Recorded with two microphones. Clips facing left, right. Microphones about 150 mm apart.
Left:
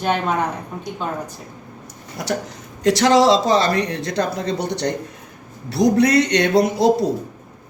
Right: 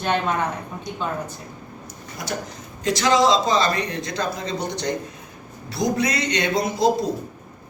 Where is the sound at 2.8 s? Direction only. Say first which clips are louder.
Left 4 dB; 70° left (ahead or behind).